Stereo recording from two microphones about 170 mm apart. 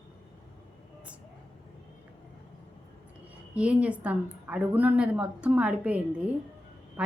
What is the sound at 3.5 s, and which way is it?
A woman's voice, 5° right (ahead or behind).